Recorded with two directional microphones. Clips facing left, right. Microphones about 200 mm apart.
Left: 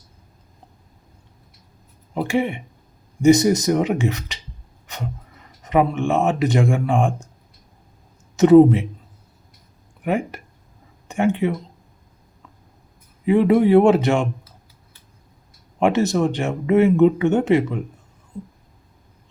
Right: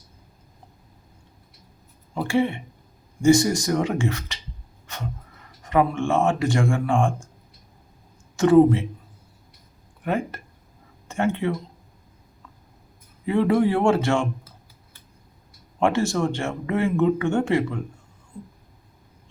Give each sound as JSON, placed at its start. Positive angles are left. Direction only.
{"t": 2.1, "sound": "speech", "side_deg": 15}
{"t": 5.6, "sound": "speech", "side_deg": 20}
{"t": 8.4, "sound": "speech", "side_deg": 20}
{"t": 10.0, "sound": "speech", "side_deg": 15}
{"t": 13.2, "sound": "speech", "side_deg": 15}
{"t": 15.8, "sound": "speech", "side_deg": 20}